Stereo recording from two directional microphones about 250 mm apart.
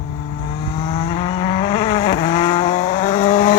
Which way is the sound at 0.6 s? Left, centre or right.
Centre.